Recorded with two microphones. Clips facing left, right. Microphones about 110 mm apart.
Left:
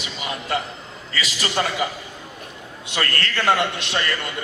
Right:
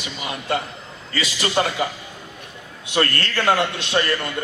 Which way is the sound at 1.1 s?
30° right (ahead or behind).